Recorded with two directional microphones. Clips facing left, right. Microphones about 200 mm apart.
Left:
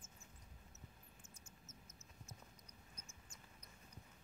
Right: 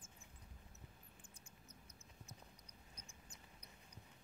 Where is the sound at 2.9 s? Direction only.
35° right (ahead or behind).